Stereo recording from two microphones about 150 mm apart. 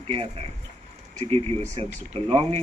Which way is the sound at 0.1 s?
40° right (ahead or behind).